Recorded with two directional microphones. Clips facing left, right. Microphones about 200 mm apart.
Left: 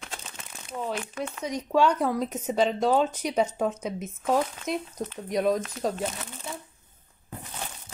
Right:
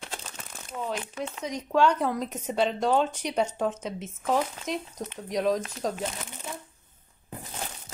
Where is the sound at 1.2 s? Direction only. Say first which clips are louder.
Left 1 dB; 20° right (ahead or behind).